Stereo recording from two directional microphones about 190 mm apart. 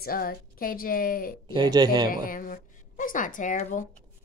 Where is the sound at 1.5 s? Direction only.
20° right (ahead or behind).